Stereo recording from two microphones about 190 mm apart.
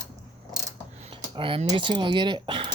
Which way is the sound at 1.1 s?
25° right (ahead or behind).